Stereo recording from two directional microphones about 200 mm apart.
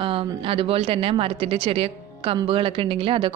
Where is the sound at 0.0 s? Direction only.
25° right (ahead or behind).